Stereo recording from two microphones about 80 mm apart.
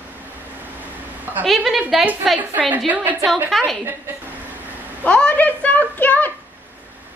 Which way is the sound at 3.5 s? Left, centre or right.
Centre.